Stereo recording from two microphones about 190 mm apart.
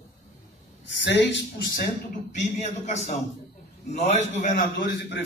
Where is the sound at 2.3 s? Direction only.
35° left (ahead or behind).